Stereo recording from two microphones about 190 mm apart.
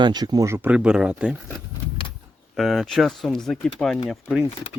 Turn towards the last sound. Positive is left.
turn(degrees=-5)  # may be behind; listen again after turning